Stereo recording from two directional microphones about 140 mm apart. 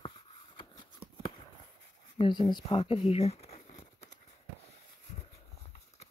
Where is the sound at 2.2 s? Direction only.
35° left (ahead or behind); by 4.1 s 55° left (ahead or behind).